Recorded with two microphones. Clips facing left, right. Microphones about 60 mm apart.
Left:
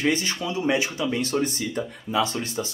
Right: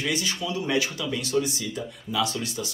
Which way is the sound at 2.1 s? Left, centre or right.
Left.